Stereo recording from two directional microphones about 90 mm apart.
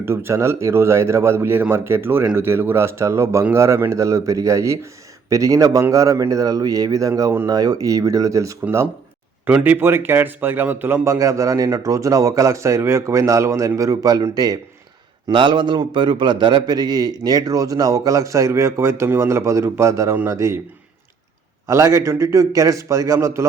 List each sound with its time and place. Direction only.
0.0 s a man's voice: 25° right (ahead or behind)
9.6 s a man's voice: 25° right (ahead or behind); by 14.6 s 45° right (ahead or behind)
15.3 s a man's voice: 60° right (ahead or behind); by 20.6 s 30° right (ahead or behind)
21.7 s a man's voice: 35° right (ahead or behind)